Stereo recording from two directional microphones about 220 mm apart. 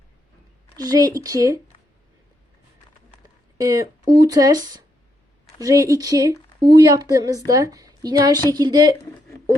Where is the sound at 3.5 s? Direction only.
15° right (ahead or behind).